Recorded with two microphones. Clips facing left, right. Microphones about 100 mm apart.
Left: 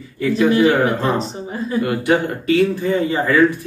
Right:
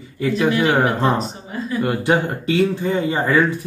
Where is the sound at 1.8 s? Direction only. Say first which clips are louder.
Even; 20° right (ahead or behind).